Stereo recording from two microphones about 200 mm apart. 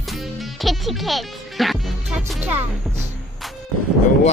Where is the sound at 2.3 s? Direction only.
10° right (ahead or behind).